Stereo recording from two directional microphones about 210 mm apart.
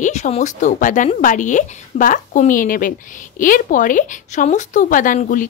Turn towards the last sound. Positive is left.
turn(degrees=40)  # may be behind; listen again after turning